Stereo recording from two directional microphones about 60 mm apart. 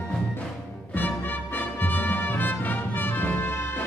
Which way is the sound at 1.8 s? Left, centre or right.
Left.